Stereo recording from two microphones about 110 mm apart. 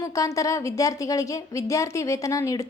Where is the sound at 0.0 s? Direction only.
30° left (ahead or behind).